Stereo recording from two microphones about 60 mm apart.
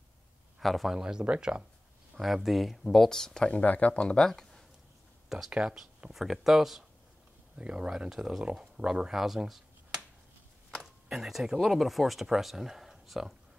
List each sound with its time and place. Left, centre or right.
0.6 s a man's voice: centre
0.9 s speech: centre
2.1 s speech: centre
3.5 s speech: left
4.2 s speech: centre
5.5 s speech: centre
7.5 s speech: centre
10.8 s speech: centre